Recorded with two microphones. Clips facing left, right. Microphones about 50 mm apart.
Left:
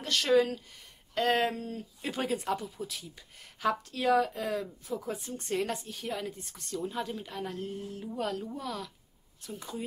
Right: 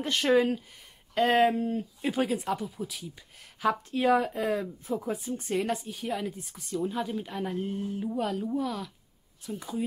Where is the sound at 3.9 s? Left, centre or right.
Right.